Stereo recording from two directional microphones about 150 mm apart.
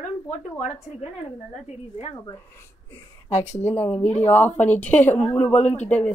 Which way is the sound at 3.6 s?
10° left (ahead or behind).